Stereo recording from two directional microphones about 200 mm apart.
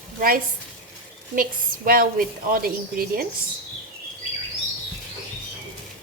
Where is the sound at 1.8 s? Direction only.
45° right (ahead or behind).